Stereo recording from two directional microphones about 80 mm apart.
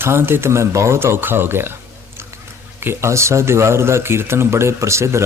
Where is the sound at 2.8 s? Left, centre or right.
Right.